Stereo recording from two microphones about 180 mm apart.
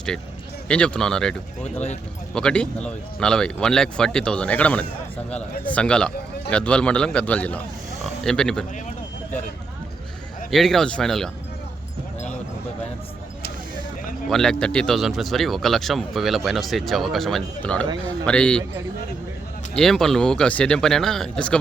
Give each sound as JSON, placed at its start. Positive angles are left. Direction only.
{"t": 0.7, "sound": "speech", "side_deg": 5}
{"t": 10.5, "sound": "speech", "side_deg": 0}
{"t": 14.3, "sound": "speech", "side_deg": 5}
{"t": 19.7, "sound": "speech", "side_deg": 0}